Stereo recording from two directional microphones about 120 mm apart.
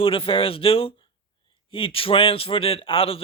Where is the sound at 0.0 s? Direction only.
50° left (ahead or behind).